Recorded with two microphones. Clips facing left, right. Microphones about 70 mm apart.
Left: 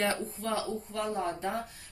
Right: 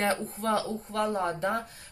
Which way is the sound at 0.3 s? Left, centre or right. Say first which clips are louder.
Right 4 dB; right.